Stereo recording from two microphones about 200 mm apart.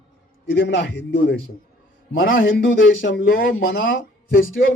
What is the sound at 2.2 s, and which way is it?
Speech, 75° left (ahead or behind).